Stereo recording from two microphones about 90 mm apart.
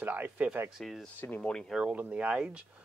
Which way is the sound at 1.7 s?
15° right (ahead or behind).